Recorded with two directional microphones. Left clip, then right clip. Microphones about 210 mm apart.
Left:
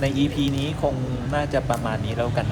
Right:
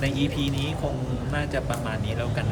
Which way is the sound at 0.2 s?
10° left (ahead or behind).